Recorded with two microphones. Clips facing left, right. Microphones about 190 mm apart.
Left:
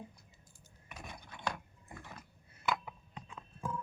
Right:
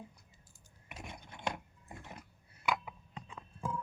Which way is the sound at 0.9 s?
25° right (ahead or behind).